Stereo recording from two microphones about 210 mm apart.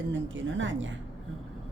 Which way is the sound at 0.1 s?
65° right (ahead or behind).